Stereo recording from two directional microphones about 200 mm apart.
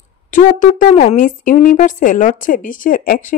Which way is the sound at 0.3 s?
40° left (ahead or behind).